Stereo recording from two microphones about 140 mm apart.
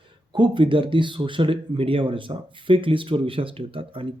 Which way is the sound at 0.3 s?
35° right (ahead or behind).